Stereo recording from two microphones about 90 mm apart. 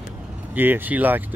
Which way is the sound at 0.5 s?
20° right (ahead or behind).